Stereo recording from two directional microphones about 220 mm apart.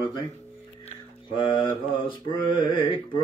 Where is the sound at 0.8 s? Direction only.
20° left (ahead or behind).